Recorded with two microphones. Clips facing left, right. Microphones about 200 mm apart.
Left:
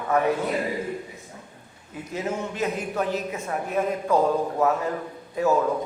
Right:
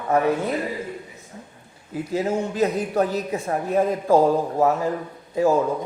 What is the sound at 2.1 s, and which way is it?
Speech, 35° right (ahead or behind).